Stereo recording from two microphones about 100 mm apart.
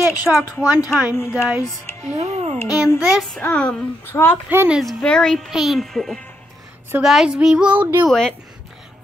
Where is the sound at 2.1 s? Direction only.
90° right.